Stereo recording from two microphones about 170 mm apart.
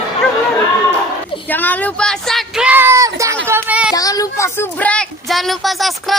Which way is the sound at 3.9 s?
20° left (ahead or behind).